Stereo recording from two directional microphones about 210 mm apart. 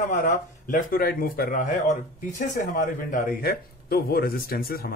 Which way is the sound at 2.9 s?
40° left (ahead or behind).